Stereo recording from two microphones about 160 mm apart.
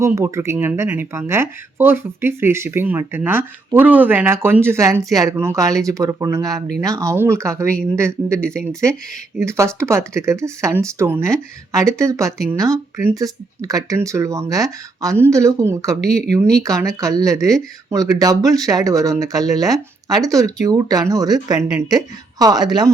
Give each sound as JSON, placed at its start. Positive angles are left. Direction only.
{"t": 0.0, "sound": "speech", "side_deg": -20}
{"t": 8.4, "sound": "speech", "side_deg": 5}
{"t": 9.4, "sound": "speech", "side_deg": -15}
{"t": 16.0, "sound": "speech", "side_deg": 0}
{"t": 17.0, "sound": "speech", "side_deg": -20}